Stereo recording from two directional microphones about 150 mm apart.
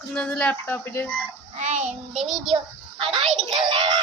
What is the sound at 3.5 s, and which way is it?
Speech, 35° right (ahead or behind).